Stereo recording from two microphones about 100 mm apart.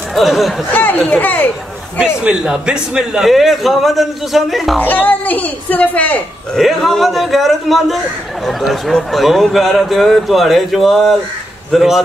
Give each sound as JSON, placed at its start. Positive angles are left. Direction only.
{"t": 0.1, "sound": "speech", "side_deg": 0}
{"t": 0.7, "sound": "speech", "side_deg": 20}
{"t": 2.2, "sound": "a man's voice", "side_deg": -10}
{"t": 4.7, "sound": "speech", "side_deg": 15}
{"t": 6.5, "sound": "a man's voice", "side_deg": 0}